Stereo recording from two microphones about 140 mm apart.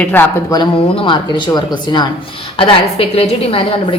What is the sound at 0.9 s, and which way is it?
A woman's voice, 35° left (ahead or behind).